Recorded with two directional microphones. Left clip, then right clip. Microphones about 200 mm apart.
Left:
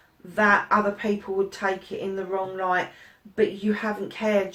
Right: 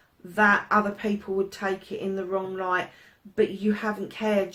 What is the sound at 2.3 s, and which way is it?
Speech, 45° right (ahead or behind).